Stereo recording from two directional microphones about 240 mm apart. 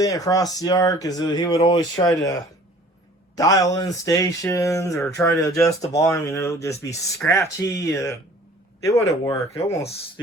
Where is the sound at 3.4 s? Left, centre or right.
Centre.